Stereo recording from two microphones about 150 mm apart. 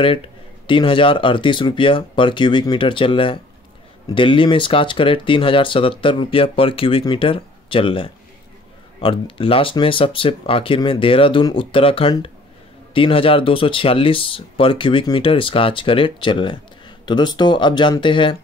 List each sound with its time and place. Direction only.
0.7 s speech: 35° left (ahead or behind)